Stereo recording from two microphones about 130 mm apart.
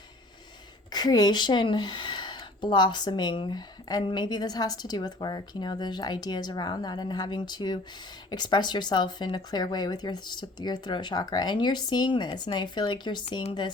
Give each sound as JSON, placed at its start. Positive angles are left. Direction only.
{"t": 0.9, "sound": "speech", "side_deg": 30}